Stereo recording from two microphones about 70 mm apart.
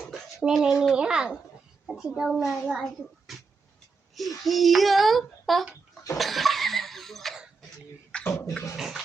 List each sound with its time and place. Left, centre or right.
0.1 s a child's voice: centre
6.1 s cough: centre
8.3 s beatboxing: left
8.7 s bathtub: centre